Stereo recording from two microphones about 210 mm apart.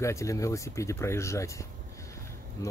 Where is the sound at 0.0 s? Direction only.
15° left (ahead or behind).